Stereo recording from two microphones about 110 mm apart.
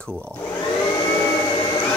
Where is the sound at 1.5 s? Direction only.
45° left (ahead or behind).